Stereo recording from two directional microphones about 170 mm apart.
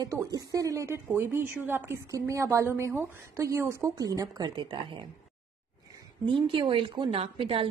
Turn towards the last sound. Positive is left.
turn(degrees=-30)  # may be behind; listen again after turning